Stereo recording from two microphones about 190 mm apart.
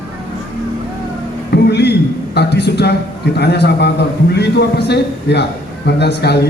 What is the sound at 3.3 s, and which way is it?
Speech, 60° left (ahead or behind).